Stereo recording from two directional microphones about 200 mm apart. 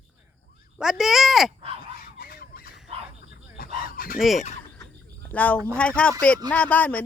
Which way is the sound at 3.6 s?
45° left (ahead or behind).